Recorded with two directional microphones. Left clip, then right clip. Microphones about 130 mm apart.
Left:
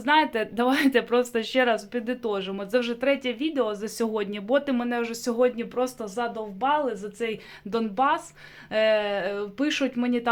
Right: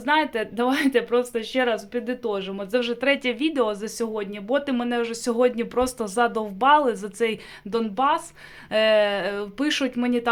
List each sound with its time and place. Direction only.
0.0 s speech: 5° left (ahead or behind); by 3.8 s 20° right (ahead or behind)
3.8 s speech: centre (ahead or behind)
4.5 s speech: 5° right (ahead or behind); by 5.6 s 25° right (ahead or behind)
5.7 s speech: 50° right (ahead or behind)
7.7 s speech: 5° right (ahead or behind)
8.7 s speech: 20° right (ahead or behind)